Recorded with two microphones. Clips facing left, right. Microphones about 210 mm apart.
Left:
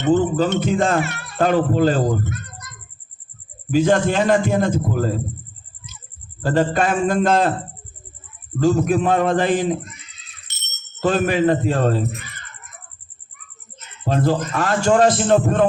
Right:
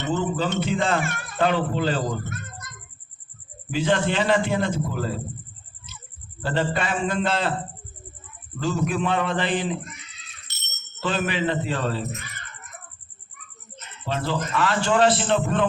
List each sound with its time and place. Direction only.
0.2 s a man's voice: 45° left (ahead or behind)
1.0 s speech: 50° right (ahead or behind)
1.4 s a man's voice: 45° left (ahead or behind)
3.7 s a man's voice: 45° left (ahead or behind)
6.4 s a man's voice: 45° left (ahead or behind)
8.6 s a man's voice: 45° left (ahead or behind)
11.0 s a man's voice: 45° left (ahead or behind)
14.0 s a man's voice: 45° left (ahead or behind)